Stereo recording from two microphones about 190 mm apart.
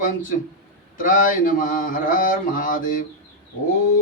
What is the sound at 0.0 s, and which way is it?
Mantra, 45° left (ahead or behind).